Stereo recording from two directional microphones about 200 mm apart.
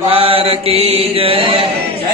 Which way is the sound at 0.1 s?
30° right (ahead or behind).